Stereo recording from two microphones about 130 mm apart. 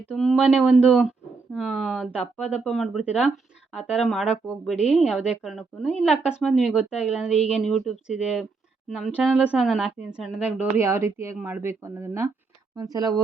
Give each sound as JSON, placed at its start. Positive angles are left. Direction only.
{"t": 0.1, "sound": "speech", "side_deg": 0}
{"t": 10.8, "sound": "speech", "side_deg": -20}